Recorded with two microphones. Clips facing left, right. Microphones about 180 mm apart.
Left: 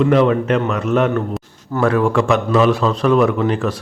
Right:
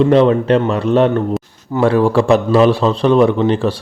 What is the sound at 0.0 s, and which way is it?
A man's voice, 30° right (ahead or behind).